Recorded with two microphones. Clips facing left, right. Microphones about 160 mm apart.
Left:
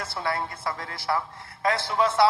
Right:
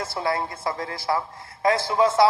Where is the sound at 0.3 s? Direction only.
15° right (ahead or behind).